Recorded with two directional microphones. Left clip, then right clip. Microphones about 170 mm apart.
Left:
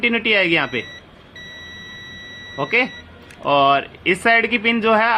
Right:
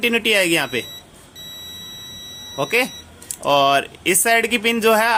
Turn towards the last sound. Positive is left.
turn(degrees=-20)  # may be behind; listen again after turning